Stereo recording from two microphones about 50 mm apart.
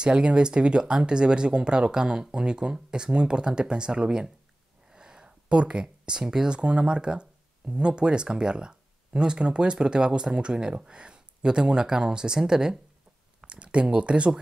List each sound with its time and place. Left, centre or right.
0.0 s speech: right